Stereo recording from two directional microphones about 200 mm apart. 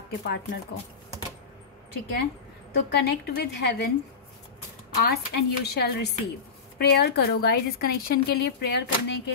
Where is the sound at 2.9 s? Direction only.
55° left (ahead or behind).